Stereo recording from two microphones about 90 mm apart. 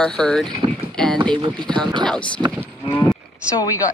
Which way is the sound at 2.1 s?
10° left (ahead or behind).